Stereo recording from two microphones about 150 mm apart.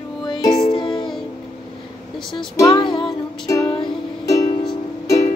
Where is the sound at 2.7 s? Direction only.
35° left (ahead or behind).